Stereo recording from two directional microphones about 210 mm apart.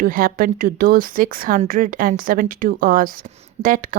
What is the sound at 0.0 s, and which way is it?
Speech, 45° right (ahead or behind).